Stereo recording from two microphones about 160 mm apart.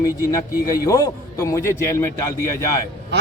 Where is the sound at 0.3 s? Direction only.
20° left (ahead or behind).